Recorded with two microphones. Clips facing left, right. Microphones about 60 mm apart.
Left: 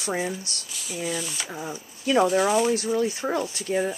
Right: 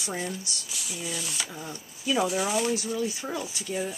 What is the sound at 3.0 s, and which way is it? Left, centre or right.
Speech, left.